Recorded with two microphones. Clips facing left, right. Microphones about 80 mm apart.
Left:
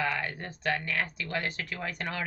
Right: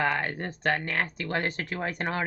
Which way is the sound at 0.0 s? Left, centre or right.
Right.